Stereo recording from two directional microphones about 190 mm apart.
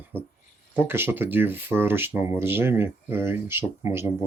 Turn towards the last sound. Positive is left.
turn(degrees=-15)  # may be behind; listen again after turning